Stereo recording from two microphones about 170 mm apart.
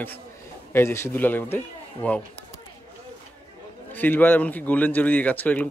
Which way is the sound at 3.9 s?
10° left (ahead or behind).